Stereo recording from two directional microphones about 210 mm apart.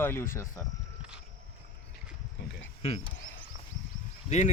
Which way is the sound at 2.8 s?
30° left (ahead or behind).